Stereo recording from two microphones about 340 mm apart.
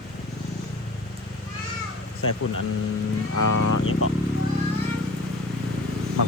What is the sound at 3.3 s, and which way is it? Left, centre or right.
Speech, left.